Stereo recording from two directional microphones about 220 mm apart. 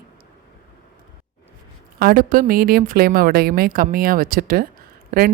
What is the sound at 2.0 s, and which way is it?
A woman's voice, 40° right (ahead or behind).